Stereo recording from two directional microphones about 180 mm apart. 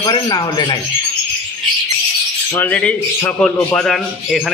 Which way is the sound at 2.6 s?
5° left (ahead or behind).